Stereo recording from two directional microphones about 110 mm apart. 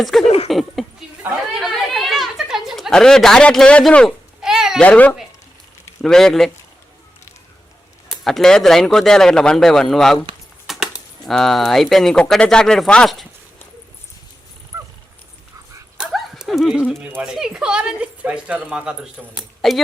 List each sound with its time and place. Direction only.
0.0 s speech: centre (ahead or behind)
1.5 s chatter: centre (ahead or behind)
2.9 s a man's voice: 5° left (ahead or behind)
4.4 s babbling: 5° right (ahead or behind)
4.8 s a man's voice: 15° left (ahead or behind)
8.2 s speech: 5° left (ahead or behind)
10.7 s typewriter: centre (ahead or behind)
11.3 s a man's voice: centre (ahead or behind)
14.7 s dog: 25° right (ahead or behind)
16.0 s dog: 5° right (ahead or behind)
17.2 s speech: 5° right (ahead or behind)